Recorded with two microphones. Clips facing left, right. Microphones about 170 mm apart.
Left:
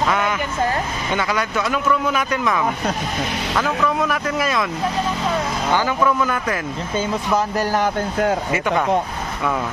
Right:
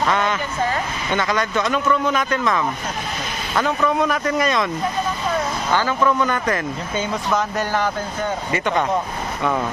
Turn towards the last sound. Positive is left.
turn(degrees=40)  # may be behind; listen again after turning